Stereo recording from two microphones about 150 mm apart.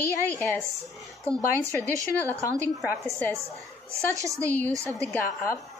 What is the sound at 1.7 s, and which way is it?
Speech, 20° right (ahead or behind).